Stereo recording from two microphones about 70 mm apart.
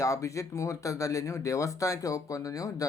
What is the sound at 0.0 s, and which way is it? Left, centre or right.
Speech, left.